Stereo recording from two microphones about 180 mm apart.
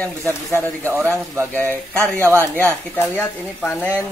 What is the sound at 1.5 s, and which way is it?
Speech, 10° left (ahead or behind).